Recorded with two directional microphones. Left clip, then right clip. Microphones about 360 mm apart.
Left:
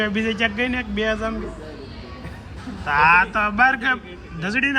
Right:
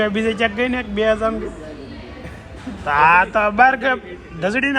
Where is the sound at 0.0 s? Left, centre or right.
Centre.